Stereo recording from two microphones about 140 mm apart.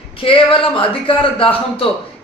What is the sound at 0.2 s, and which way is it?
A man's voice, 40° left (ahead or behind).